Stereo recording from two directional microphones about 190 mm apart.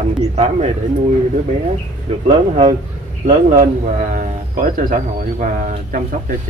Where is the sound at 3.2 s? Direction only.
45° right (ahead or behind).